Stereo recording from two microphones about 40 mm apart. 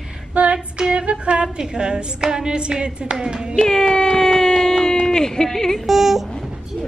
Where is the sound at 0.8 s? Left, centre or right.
Right.